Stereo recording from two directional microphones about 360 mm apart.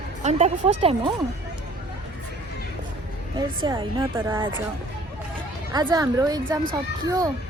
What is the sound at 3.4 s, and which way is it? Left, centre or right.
A woman's voice, centre.